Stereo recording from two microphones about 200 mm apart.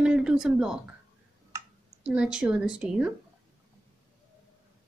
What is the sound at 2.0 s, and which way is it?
Speech, 5° right (ahead or behind).